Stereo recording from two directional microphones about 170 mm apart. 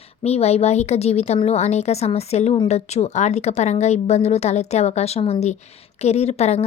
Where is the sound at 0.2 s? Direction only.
40° left (ahead or behind).